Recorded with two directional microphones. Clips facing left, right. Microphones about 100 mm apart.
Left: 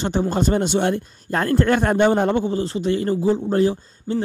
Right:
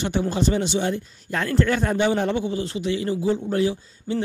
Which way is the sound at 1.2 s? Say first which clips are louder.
Left 4 dB; 40° left (ahead or behind).